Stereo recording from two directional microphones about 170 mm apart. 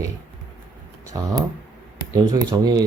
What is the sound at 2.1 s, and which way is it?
Speech, 20° right (ahead or behind).